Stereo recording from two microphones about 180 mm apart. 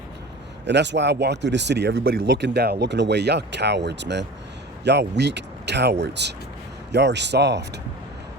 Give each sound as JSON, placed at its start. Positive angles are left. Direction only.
{"t": 0.6, "sound": "speech", "side_deg": -75}